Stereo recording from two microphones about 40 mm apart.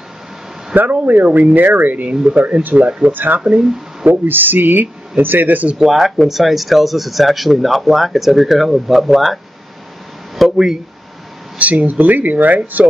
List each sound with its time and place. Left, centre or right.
0.7 s speech: right
3.1 s speech: right
5.8 s speech: centre
10.3 s a sound: centre
11.5 s speech: right